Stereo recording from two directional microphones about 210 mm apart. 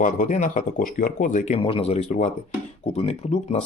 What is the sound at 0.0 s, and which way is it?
Speech, 40° left (ahead or behind).